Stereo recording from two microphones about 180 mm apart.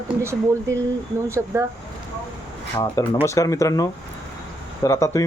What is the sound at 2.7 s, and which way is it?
Speech, 20° left (ahead or behind).